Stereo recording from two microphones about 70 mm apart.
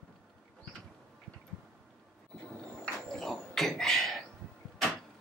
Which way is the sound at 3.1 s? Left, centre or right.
Centre.